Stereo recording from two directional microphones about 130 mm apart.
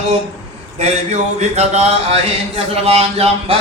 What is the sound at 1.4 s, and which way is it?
Speech, 60° right (ahead or behind).